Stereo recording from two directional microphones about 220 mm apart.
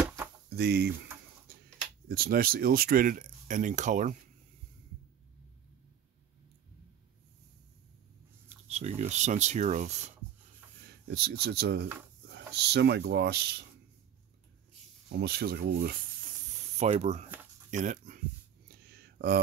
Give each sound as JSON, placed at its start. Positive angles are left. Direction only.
{"t": 0.0, "sound": "a sound", "side_deg": -10}
{"t": 0.5, "sound": "speech", "side_deg": -45}
{"t": 2.0, "sound": "speech", "side_deg": -40}
{"t": 8.6, "sound": "speech", "side_deg": -30}
{"t": 11.1, "sound": "speech", "side_deg": -45}
{"t": 15.1, "sound": "speech", "side_deg": -45}
{"t": 16.6, "sound": "speech", "side_deg": -30}
{"t": 18.9, "sound": "a sound", "side_deg": -45}